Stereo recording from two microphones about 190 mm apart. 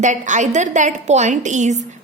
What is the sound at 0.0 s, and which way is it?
A woman's voice, 40° right (ahead or behind).